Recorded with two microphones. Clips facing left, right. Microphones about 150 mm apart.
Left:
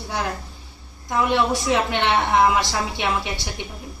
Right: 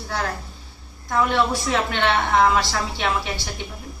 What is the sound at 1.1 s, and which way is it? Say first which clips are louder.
A woman's voice: even; 15° left (ahead or behind).